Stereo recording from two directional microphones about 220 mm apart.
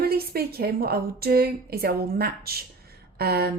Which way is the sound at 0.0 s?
45° right (ahead or behind).